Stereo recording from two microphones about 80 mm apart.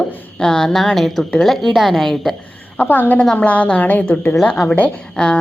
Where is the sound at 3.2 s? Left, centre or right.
Centre.